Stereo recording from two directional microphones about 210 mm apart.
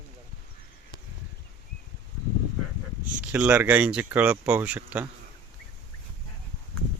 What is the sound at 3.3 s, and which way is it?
Speech, 5° right (ahead or behind).